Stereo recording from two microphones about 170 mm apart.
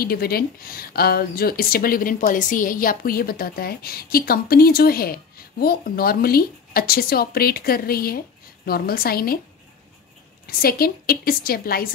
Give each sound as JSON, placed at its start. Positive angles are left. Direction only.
{"t": 0.0, "sound": "speech", "side_deg": 60}
{"t": 10.4, "sound": "speech", "side_deg": 60}